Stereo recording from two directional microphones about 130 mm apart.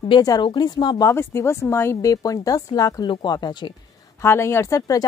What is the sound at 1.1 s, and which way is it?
Speech, 20° left (ahead or behind).